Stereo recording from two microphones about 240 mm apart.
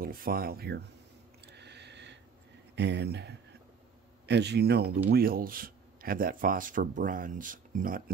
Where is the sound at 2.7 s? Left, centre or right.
Right.